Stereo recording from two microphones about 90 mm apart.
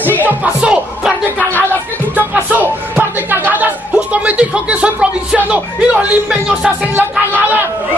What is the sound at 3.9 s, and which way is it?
Speech, 15° right (ahead or behind).